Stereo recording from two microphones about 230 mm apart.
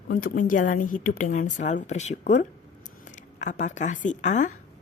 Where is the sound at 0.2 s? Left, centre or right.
Left.